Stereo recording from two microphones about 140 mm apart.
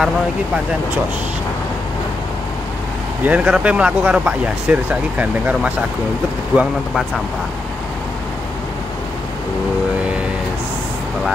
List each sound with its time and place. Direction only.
3.3 s speech: 5° right (ahead or behind)